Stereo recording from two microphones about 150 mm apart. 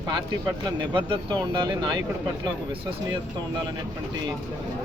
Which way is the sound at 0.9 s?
35° right (ahead or behind).